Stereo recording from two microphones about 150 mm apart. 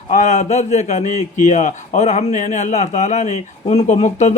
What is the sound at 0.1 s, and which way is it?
A man's voice, 50° left (ahead or behind).